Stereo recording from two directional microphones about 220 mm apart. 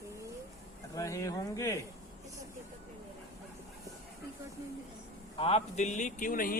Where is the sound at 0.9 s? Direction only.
15° left (ahead or behind).